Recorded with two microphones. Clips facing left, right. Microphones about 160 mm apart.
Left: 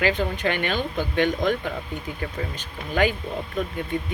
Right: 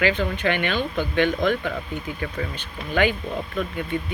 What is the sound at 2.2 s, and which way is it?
Speech, 40° left (ahead or behind).